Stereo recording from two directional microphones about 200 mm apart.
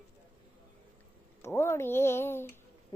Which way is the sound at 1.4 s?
10° left (ahead or behind).